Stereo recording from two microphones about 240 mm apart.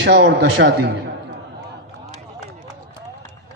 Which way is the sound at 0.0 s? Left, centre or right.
Right.